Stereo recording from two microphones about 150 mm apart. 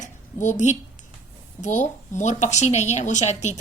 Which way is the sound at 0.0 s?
55° left (ahead or behind).